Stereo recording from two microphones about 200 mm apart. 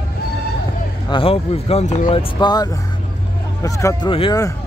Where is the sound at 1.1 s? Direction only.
25° left (ahead or behind).